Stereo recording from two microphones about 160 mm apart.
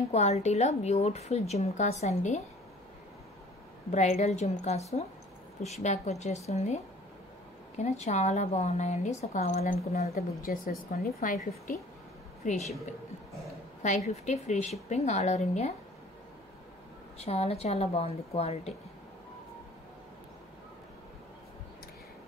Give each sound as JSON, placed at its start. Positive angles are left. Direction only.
{"t": 0.1, "sound": "a woman's voice", "side_deg": 45}
{"t": 3.9, "sound": "a woman's voice", "side_deg": 45}
{"t": 10.4, "sound": "a woman's voice", "side_deg": 55}
{"t": 12.4, "sound": "a woman's voice", "side_deg": 50}
{"t": 13.8, "sound": "a woman's voice", "side_deg": 45}
{"t": 17.2, "sound": "a woman's voice", "side_deg": 40}